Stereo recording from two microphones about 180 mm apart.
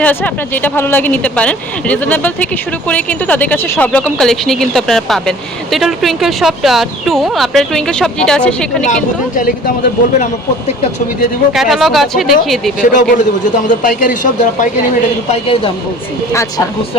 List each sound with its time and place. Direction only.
0.0 s speech: 10° left (ahead or behind)
8.9 s a man's voice: 50° left (ahead or behind)
11.5 s speech: centre (ahead or behind)
12.8 s a man's voice: 45° left (ahead or behind)
15.3 s a man's voice: 30° left (ahead or behind)
16.3 s speech: 15° left (ahead or behind)